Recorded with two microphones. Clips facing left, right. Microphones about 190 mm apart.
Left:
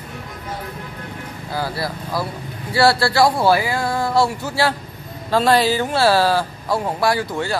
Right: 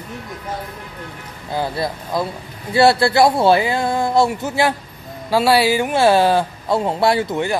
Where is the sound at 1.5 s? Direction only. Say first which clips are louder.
Right 3 dB; 20° right (ahead or behind).